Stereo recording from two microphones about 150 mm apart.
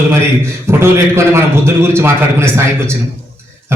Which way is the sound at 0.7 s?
15° right (ahead or behind).